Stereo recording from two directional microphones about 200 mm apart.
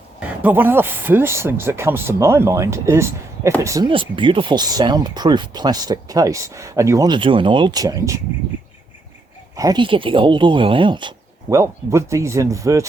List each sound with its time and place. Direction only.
0.4 s speech: 10° right (ahead or behind)
9.6 s speech: 20° right (ahead or behind)